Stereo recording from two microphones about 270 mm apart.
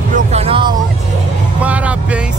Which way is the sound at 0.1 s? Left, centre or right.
Right.